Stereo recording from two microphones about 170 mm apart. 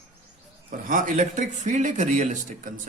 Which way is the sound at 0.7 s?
50° right (ahead or behind).